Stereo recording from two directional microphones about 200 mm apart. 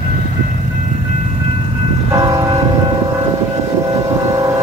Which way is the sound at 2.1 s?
15° right (ahead or behind).